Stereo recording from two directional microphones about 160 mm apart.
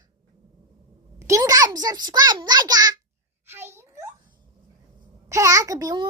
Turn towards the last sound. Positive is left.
turn(degrees=-20)  # may be behind; listen again after turning